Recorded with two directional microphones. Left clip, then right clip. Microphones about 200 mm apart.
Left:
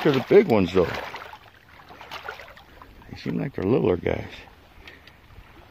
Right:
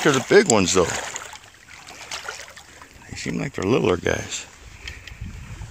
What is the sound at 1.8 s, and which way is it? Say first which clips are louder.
Boat: right 3 dB; 15° right (ahead or behind).